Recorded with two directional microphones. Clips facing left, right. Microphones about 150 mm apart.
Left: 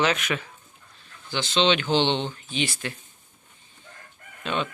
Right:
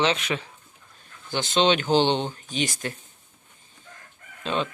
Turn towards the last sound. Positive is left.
turn(degrees=-30)  # may be behind; listen again after turning